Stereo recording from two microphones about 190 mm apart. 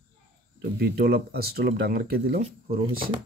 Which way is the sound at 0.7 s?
55° right (ahead or behind).